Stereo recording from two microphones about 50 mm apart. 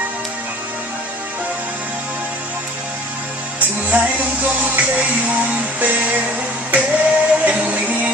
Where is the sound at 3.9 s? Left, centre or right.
Right.